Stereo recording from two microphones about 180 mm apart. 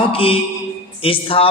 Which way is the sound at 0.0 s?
30° left (ahead or behind).